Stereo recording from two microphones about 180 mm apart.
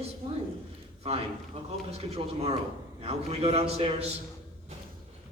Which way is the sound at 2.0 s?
35° right (ahead or behind).